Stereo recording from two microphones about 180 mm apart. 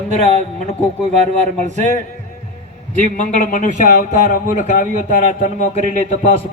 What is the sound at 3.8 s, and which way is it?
Speech, 40° right (ahead or behind).